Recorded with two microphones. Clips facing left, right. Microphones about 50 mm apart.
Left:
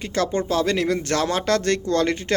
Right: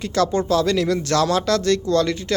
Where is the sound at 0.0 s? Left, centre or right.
Left.